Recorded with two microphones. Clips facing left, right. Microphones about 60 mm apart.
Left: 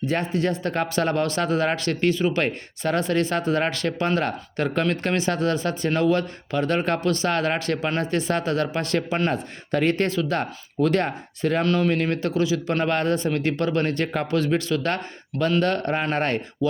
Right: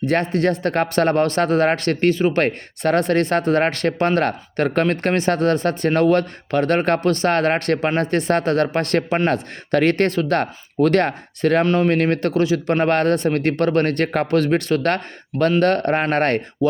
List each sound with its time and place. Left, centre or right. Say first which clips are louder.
0.0 s speech: right 5 dB; right
2.4 s speech: right 5 dB; right
11.6 s speech: right 4 dB; right
11.9 s speech: right 5 dB; right